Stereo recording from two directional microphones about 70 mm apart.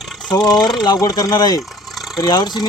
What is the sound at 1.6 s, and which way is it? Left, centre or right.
Vehicle, centre.